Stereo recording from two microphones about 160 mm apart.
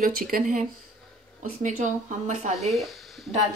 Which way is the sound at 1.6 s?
50° right (ahead or behind).